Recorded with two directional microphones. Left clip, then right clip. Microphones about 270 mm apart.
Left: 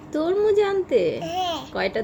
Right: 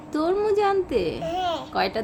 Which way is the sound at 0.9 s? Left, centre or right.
Right.